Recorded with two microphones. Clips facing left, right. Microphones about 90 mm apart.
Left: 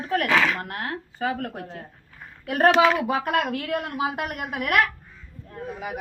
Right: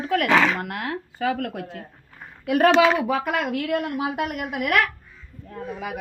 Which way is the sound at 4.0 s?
65° left (ahead or behind).